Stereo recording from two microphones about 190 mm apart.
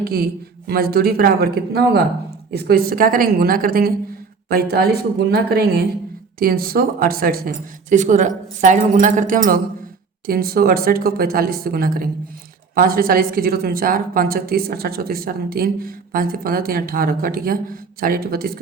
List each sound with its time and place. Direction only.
0.0 s a woman's voice: 55° right (ahead or behind)